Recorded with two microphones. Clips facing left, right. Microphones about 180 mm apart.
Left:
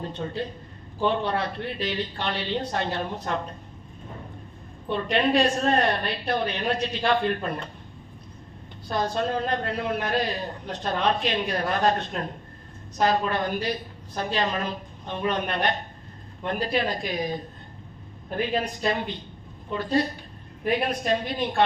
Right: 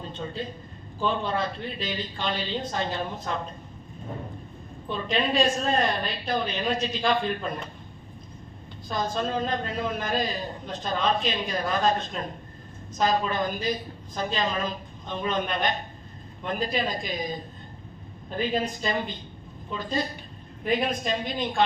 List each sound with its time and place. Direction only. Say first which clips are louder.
0.1 s a man's voice: left 3 dB; 70° left (ahead or behind)
4.9 s a man's voice: left 4 dB; 65° left (ahead or behind)
8.9 s a man's voice: left 2 dB; 65° left (ahead or behind)
15.0 s a man's voice: left 1 dB; 70° left (ahead or behind)
18.5 s a woman's voice: left 2 dB; 65° left (ahead or behind)